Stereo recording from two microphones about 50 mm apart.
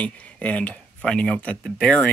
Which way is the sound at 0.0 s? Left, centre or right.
Left.